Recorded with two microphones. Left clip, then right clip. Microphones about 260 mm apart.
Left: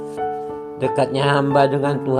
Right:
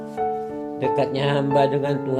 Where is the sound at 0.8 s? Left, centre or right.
Centre.